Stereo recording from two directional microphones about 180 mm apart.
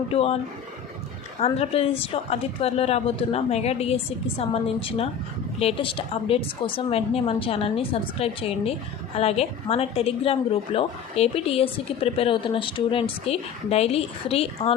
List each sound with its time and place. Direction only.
0.1 s a woman's voice: 35° left (ahead or behind)
1.4 s a woman's voice: 35° left (ahead or behind)